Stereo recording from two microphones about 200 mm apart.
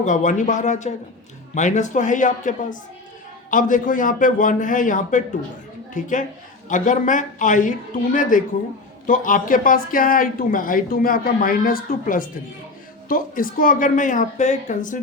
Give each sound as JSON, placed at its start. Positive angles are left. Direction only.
{"t": 0.0, "sound": "a woman's voice", "side_deg": 40}